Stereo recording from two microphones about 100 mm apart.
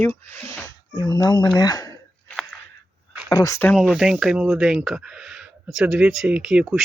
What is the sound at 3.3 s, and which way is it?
Speech, 35° left (ahead or behind).